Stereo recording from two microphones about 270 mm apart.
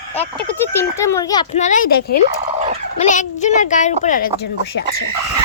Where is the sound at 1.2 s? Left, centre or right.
Centre.